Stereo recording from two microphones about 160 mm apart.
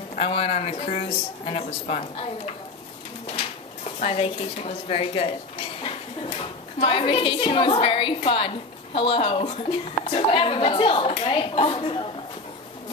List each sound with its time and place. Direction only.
0.3 s a woman's voice: 40° left (ahead or behind)